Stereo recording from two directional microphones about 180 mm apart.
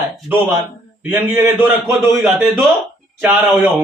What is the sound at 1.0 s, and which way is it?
Speech, 10° right (ahead or behind).